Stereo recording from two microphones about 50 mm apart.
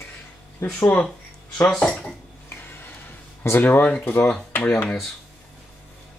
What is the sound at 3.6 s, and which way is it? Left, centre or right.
Speech, left.